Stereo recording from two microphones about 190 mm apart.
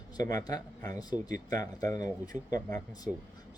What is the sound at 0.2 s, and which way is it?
Speech, 20° left (ahead or behind).